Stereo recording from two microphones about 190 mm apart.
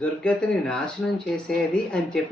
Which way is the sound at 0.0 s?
5° left (ahead or behind).